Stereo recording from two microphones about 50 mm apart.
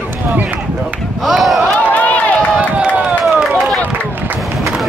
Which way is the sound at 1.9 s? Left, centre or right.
Left.